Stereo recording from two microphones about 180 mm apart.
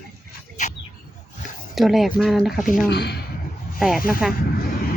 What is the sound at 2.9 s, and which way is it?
Speech, 65° left (ahead or behind).